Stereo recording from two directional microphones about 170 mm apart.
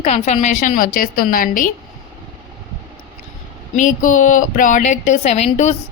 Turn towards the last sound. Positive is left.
turn(degrees=40)  # may be behind; listen again after turning